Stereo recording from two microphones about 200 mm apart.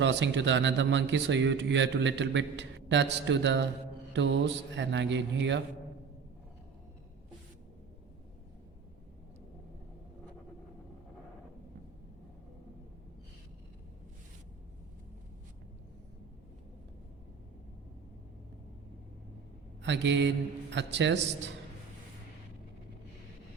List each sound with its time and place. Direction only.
0.0 s a man's voice: 65° right (ahead or behind)
19.8 s a man's voice: 65° right (ahead or behind)